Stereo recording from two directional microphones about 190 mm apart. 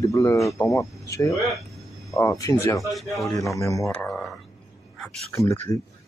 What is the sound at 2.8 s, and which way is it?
Speech, centre (ahead or behind).